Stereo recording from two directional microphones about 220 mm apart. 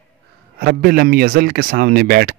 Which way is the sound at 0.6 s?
45° right (ahead or behind).